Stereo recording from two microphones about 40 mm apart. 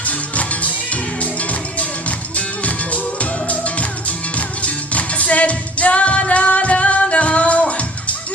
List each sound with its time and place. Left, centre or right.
0.0 s music: left